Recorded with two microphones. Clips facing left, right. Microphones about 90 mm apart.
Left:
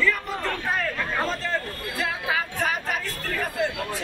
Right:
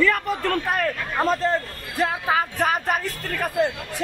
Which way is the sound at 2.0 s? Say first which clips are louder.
Right 6 dB; 40° right (ahead or behind).